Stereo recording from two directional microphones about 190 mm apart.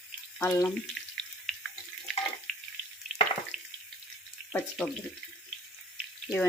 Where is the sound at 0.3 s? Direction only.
10° left (ahead or behind).